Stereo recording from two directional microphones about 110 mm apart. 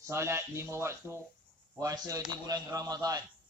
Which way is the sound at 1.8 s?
30° right (ahead or behind).